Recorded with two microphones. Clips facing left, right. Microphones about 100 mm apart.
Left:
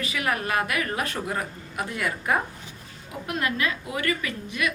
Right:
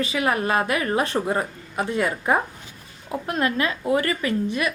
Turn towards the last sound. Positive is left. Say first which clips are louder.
# right 6 dB
turn(degrees=-30)  # may be behind; listen again after turning